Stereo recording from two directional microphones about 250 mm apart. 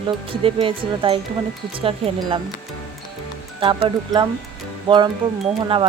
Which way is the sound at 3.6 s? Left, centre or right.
Right.